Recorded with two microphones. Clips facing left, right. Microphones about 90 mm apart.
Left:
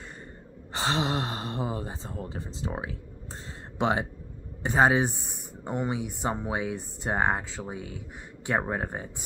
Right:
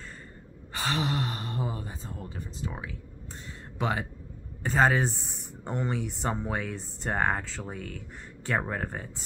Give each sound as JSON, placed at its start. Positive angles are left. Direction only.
{"t": 0.7, "sound": "speech", "side_deg": 25}